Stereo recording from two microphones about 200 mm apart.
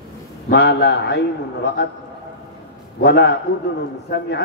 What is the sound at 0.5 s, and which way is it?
A man's voice, 55° left (ahead or behind).